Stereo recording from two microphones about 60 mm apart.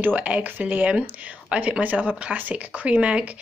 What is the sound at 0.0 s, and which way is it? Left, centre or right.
Speech, right.